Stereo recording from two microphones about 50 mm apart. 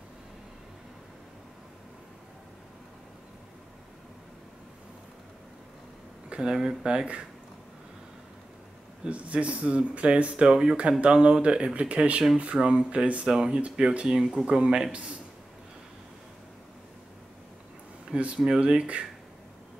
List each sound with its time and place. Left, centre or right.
6.3 s speech: centre
9.1 s speech: right
18.1 s speech: centre